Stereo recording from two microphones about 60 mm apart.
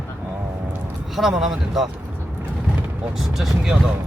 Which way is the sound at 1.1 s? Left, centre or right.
Centre.